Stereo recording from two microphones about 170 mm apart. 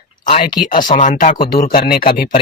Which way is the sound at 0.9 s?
50° left (ahead or behind).